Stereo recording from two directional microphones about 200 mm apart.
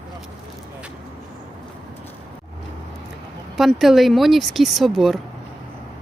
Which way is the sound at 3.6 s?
Centre (ahead or behind).